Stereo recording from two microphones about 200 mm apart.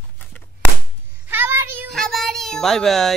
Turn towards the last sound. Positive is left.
turn(degrees=0)  # may be behind; listen again after turning